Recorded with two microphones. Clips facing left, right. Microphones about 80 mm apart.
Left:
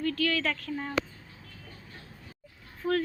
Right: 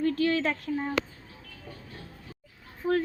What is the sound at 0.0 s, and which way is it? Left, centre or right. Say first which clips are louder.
Speech: right 3 dB; right.